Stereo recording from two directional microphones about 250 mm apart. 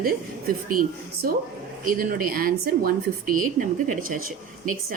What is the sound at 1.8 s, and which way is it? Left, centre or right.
A woman's voice, right.